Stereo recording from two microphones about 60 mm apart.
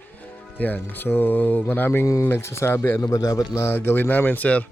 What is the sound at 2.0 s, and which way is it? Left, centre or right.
Speech, left.